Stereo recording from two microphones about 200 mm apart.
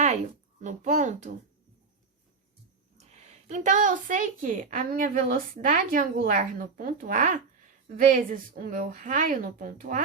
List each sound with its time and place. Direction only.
0.6 s a woman's voice: 35° right (ahead or behind)
3.1 s a woman's voice: 40° right (ahead or behind)